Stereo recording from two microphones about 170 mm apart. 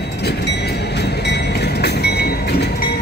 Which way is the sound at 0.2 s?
75° left (ahead or behind).